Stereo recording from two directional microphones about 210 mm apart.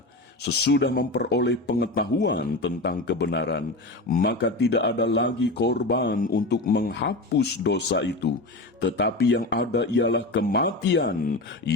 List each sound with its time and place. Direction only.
0.4 s speech: 50° left (ahead or behind)